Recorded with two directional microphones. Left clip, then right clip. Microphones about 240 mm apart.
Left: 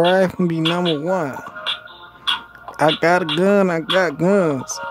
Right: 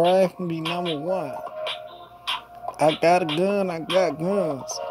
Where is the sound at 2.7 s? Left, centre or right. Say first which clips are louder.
Left 3 dB; centre.